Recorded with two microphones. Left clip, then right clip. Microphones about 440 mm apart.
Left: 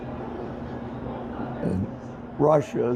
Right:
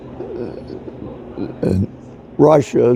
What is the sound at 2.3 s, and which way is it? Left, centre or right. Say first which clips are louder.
Speech: right 9 dB; right.